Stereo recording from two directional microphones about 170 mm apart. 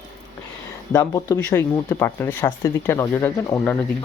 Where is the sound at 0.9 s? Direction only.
20° left (ahead or behind).